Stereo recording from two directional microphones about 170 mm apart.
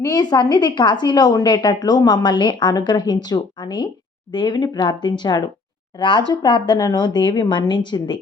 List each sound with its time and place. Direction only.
0.0 s a woman's voice: 25° left (ahead or behind)